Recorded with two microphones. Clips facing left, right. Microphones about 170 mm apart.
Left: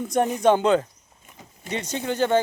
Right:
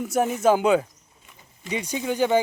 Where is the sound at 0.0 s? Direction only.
5° right (ahead or behind).